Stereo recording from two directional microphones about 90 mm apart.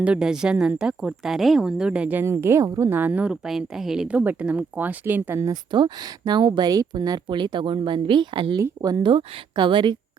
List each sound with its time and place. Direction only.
0.0 s speech: 10° right (ahead or behind)
2.2 s speech: 30° right (ahead or behind)
2.9 s speech: 20° right (ahead or behind)
3.4 s a woman's voice: 5° right (ahead or behind)
4.2 s speech: 15° right (ahead or behind)
5.7 s speech: 55° right (ahead or behind)
9.0 s speech: 75° right (ahead or behind)